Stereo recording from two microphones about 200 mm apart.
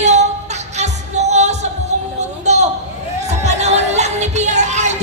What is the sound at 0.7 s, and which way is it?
Music, 35° right (ahead or behind).